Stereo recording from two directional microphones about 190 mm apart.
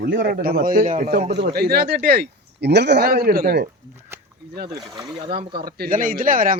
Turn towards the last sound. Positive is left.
turn(degrees=-45)  # may be behind; listen again after turning